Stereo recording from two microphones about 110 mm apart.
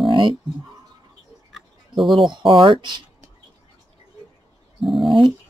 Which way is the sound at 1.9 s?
Centre (ahead or behind).